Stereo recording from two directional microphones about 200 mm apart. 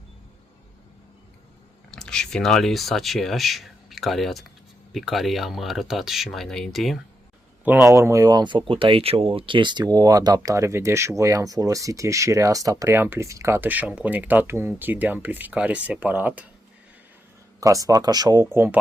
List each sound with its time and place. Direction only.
1.9 s speech: 5° left (ahead or behind)
7.6 s speech: 10° right (ahead or behind)
17.6 s speech: 15° right (ahead or behind)